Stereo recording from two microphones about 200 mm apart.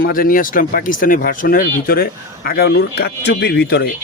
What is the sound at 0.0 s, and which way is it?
Speech, 45° left (ahead or behind).